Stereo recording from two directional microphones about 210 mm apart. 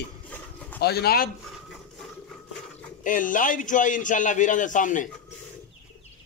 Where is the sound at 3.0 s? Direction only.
40° left (ahead or behind).